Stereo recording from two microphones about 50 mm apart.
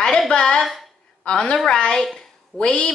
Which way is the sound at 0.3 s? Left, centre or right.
Centre.